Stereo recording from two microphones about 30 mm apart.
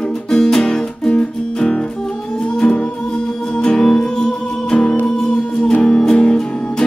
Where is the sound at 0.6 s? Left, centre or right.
Left.